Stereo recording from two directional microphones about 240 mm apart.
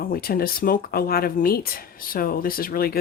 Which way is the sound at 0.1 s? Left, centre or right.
Left.